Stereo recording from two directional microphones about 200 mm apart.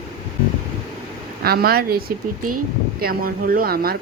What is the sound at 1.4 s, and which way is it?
Speech, 50° right (ahead or behind).